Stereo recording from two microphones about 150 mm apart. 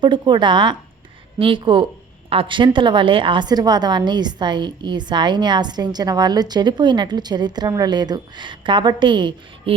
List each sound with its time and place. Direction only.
0.0 s a woman's voice: 30° right (ahead or behind)